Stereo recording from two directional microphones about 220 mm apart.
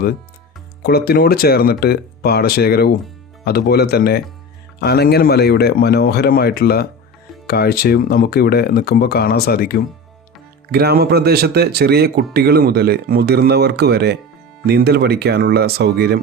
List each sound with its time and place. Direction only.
0.8 s speech: 45° left (ahead or behind)
10.7 s speech: 45° right (ahead or behind)